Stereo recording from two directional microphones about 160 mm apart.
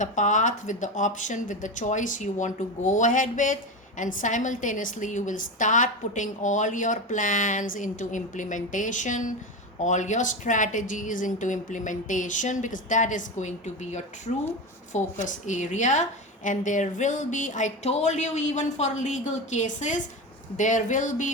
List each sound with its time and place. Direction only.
0.0 s speech: 50° left (ahead or behind)
14.9 s speech: 50° left (ahead or behind)